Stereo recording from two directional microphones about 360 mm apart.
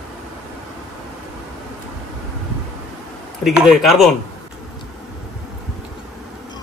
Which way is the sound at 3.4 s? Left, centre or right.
Centre.